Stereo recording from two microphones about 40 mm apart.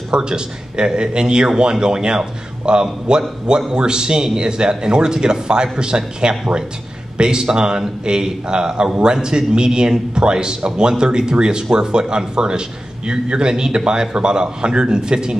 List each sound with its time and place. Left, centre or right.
0.1 s a man's voice: right